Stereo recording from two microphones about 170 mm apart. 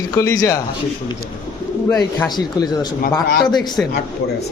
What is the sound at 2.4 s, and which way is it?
Speech, 25° left (ahead or behind).